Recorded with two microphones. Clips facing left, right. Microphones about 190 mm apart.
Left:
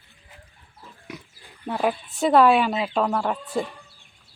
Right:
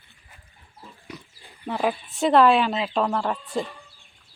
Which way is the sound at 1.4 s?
Centre (ahead or behind).